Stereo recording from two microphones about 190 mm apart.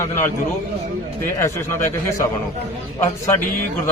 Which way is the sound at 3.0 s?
15° left (ahead or behind).